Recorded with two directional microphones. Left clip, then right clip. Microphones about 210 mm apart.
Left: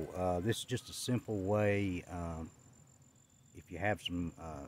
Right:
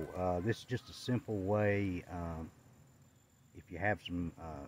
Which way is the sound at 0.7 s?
20° left (ahead or behind).